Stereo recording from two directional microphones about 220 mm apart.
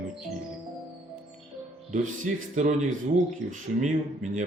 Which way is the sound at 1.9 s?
35° right (ahead or behind).